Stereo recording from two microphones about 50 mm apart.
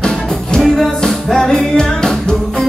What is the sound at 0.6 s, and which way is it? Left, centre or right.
Music, centre.